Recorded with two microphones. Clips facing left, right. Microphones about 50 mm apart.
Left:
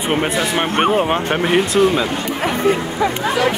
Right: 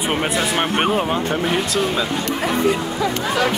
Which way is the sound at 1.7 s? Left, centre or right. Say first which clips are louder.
Left 5 dB; left.